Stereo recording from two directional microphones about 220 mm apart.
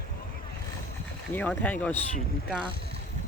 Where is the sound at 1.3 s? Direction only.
10° left (ahead or behind).